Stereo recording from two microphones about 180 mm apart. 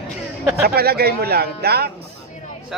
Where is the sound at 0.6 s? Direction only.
60° right (ahead or behind).